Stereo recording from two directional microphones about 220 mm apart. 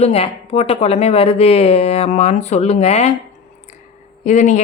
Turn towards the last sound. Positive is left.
turn(degrees=30)  # may be behind; listen again after turning